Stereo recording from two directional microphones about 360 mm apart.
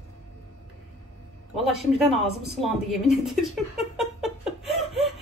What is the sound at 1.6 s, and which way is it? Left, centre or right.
A woman's voice, centre.